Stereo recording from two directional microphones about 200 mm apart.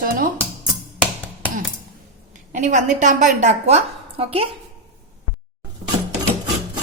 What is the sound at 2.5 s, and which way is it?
A woman's voice, 40° right (ahead or behind).